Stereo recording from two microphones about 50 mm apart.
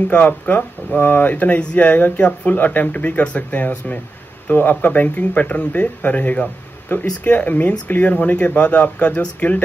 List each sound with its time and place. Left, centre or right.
0.1 s speech: left